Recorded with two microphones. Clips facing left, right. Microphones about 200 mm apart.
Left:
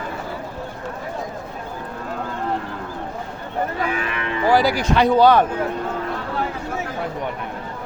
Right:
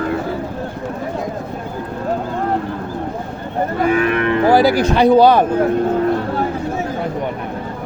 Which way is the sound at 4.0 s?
55° right (ahead or behind).